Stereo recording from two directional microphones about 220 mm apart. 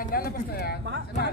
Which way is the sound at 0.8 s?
50° right (ahead or behind).